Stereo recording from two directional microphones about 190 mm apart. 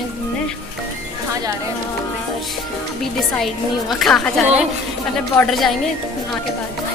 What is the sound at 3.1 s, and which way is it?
A woman's voice, centre (ahead or behind).